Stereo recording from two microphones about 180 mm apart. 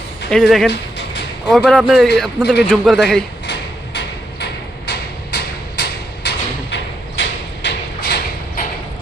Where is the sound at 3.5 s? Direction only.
70° left (ahead or behind).